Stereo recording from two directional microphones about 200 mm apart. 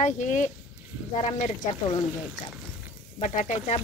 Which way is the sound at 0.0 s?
35° left (ahead or behind).